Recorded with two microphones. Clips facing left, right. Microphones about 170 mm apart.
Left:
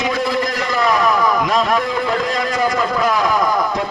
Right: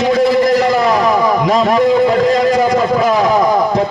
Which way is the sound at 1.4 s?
40° right (ahead or behind).